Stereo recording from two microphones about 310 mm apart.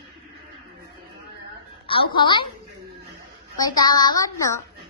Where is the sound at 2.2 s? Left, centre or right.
Centre.